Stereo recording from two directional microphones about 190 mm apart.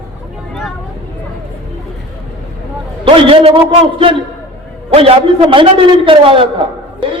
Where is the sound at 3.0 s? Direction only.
30° right (ahead or behind).